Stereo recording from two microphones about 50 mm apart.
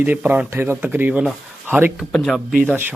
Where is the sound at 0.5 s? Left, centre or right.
Right.